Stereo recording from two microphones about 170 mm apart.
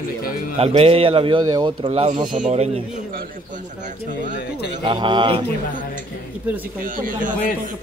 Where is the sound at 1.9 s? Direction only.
40° right (ahead or behind).